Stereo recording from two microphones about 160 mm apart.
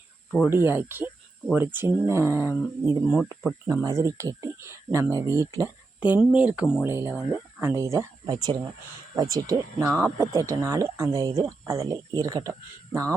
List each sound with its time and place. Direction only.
0.4 s speech: 15° right (ahead or behind)
6.0 s speech: 10° right (ahead or behind)